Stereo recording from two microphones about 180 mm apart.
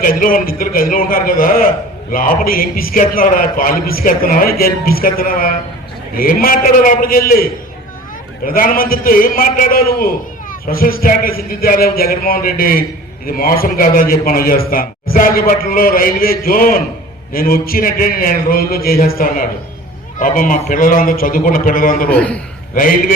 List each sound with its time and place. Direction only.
0.0 s a man's voice: 50° left (ahead or behind)
8.4 s a man's voice: 50° left (ahead or behind)
22.1 s a man's voice: 10° left (ahead or behind)
22.7 s a man's voice: 50° left (ahead or behind)